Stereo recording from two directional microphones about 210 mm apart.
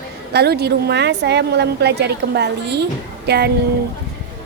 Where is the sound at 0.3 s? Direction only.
50° right (ahead or behind).